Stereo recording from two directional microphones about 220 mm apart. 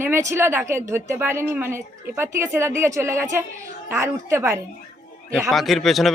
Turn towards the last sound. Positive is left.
turn(degrees=0)  # may be behind; listen again after turning